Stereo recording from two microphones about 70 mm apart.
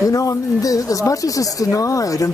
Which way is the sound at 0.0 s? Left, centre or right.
Left.